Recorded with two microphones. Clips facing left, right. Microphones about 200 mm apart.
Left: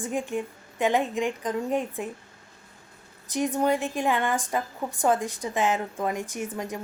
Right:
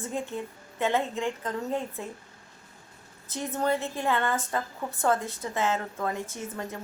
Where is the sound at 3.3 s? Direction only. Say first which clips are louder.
Left 4 dB; 15° left (ahead or behind).